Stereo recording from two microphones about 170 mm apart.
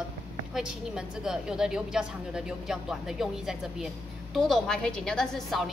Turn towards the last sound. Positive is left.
turn(degrees=0)  # may be behind; listen again after turning